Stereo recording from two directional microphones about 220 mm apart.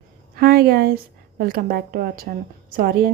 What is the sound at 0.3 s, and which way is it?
A woman's voice, 45° right (ahead or behind).